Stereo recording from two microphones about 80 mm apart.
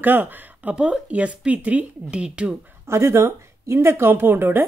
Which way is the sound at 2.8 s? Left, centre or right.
Right.